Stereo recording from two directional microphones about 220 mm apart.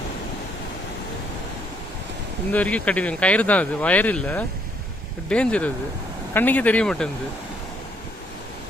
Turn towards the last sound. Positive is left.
turn(degrees=5)  # may be behind; listen again after turning